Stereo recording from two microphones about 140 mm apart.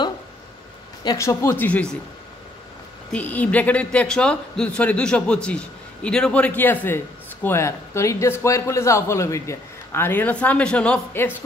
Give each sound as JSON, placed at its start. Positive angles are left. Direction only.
{"t": 1.0, "sound": "speech", "side_deg": 20}
{"t": 3.1, "sound": "a man's voice", "side_deg": 10}